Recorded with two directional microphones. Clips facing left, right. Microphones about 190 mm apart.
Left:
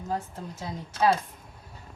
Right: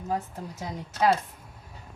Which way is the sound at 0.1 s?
15° right (ahead or behind).